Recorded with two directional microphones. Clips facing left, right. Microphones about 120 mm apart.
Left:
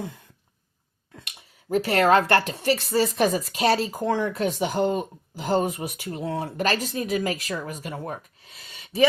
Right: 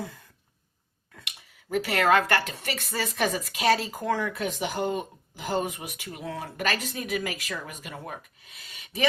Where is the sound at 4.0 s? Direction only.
30° left (ahead or behind).